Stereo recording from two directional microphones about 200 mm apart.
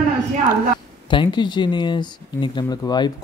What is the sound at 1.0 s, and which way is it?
Speech, 25° left (ahead or behind).